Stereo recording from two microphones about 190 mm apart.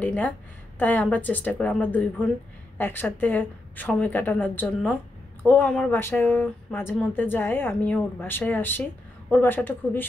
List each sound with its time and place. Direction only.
0.0 s a woman's voice: 10° left (ahead or behind)